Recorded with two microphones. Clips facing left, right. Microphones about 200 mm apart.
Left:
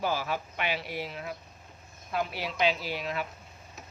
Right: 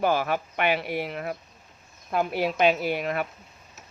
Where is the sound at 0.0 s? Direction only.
60° right (ahead or behind).